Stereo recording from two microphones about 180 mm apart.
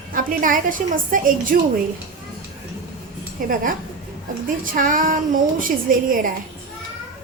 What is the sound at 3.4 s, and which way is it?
Speech, 50° right (ahead or behind).